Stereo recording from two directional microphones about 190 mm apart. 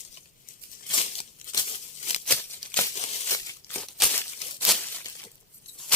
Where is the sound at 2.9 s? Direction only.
35° left (ahead or behind).